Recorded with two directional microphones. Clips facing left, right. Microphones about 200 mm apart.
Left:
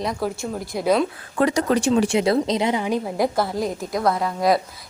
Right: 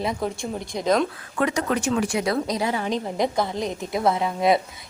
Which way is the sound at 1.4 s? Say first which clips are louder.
Left 4 dB; 35° left (ahead or behind).